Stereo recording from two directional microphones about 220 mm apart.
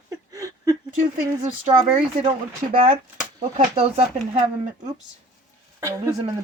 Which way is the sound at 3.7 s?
25° right (ahead or behind).